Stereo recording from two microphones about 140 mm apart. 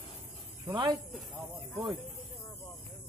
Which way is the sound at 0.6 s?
35° right (ahead or behind).